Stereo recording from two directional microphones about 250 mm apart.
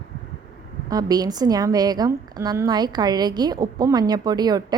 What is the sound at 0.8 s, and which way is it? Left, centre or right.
A woman's voice, centre.